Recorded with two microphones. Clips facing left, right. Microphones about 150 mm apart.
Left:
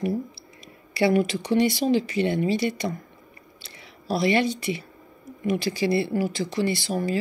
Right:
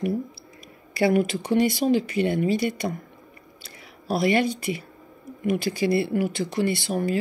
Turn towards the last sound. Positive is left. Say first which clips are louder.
# right 1 dB
turn(degrees=-55)  # may be behind; listen again after turning